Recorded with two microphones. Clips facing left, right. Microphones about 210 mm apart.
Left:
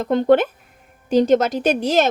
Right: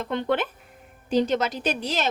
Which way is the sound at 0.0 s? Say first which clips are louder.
Left 10 dB; 45° left (ahead or behind).